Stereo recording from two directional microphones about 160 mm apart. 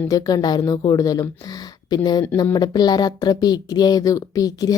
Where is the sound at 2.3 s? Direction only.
25° left (ahead or behind).